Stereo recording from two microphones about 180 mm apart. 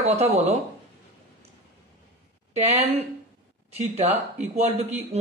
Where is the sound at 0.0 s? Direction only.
35° right (ahead or behind).